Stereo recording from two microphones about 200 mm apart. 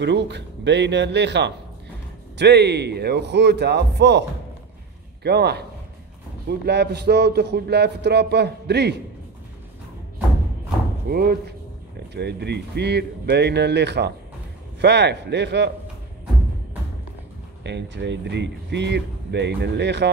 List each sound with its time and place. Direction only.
0.0 s speech: 60° right (ahead or behind)
11.1 s speech: 50° right (ahead or behind)
17.6 s speech: 60° right (ahead or behind)